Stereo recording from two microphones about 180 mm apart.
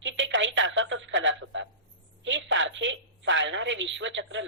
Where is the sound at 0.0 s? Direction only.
90° right.